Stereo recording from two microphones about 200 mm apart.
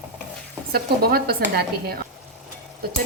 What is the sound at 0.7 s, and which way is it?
A woman's voice, 50° right (ahead or behind).